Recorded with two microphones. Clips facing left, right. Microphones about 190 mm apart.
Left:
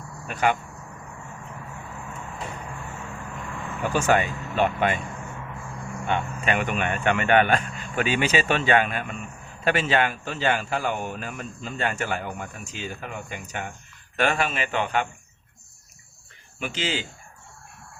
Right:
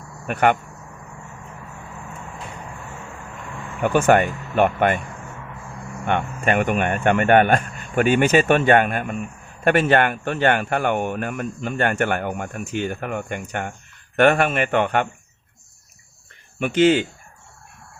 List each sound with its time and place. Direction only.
0.3 s speech: 60° right (ahead or behind)
3.8 s speech: 60° right (ahead or behind)
6.1 s speech: 55° right (ahead or behind)
16.6 s speech: 55° right (ahead or behind)